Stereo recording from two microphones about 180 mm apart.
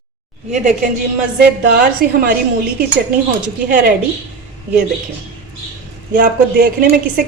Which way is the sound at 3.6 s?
50° right (ahead or behind).